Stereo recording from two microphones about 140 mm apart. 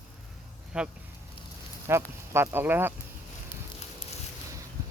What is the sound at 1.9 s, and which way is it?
Speech, 20° right (ahead or behind).